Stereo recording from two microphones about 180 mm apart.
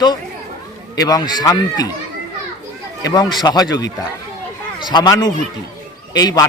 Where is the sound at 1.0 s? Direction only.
20° left (ahead or behind).